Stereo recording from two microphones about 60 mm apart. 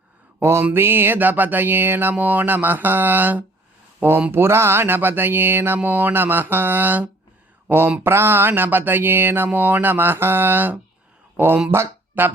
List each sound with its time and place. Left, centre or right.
0.4 s mantra: right
4.3 s mantra: right
11.3 s speech: right